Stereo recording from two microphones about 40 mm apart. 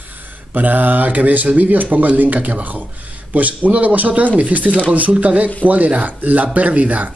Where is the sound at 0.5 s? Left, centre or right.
Right.